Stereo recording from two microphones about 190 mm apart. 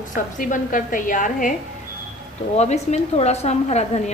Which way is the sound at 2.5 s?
35° left (ahead or behind).